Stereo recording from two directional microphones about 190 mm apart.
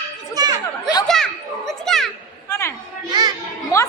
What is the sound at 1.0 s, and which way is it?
Children playing, centre (ahead or behind).